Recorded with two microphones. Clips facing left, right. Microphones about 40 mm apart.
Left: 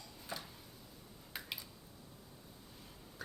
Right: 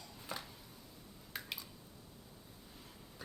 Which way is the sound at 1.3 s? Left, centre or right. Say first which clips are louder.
Right 1 dB; centre.